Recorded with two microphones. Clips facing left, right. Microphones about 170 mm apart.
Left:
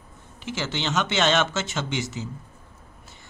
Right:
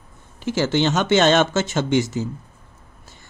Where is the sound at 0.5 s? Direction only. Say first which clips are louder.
Right 9 dB; 45° right (ahead or behind).